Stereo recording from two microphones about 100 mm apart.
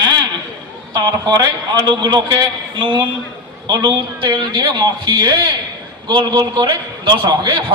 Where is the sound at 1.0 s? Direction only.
45° right (ahead or behind).